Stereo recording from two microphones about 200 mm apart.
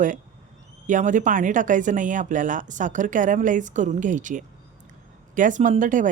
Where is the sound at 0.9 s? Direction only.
40° right (ahead or behind).